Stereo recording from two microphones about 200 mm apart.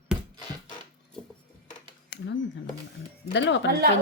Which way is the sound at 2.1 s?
60° left (ahead or behind).